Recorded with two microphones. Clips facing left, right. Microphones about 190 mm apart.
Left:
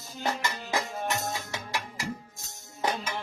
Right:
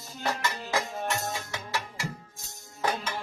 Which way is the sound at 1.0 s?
15° left (ahead or behind).